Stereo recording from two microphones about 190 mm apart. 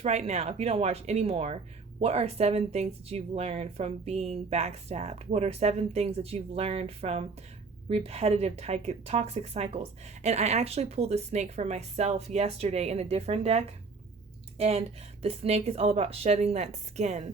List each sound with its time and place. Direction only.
0.0 s speech: 35° right (ahead or behind)